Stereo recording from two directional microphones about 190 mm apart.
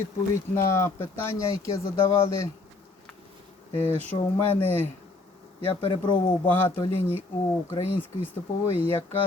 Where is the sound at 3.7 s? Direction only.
35° right (ahead or behind).